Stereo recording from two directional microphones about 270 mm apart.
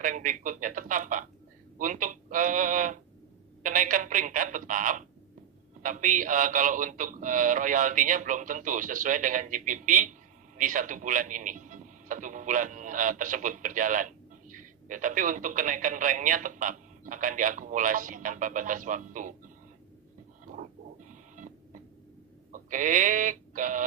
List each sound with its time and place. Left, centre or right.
0.0 s a man's voice: right
21.1 s printer: right
22.5 s speech: right